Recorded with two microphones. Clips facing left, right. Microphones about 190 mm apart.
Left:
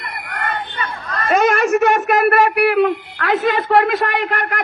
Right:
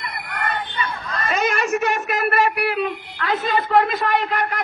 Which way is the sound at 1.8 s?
70° left (ahead or behind).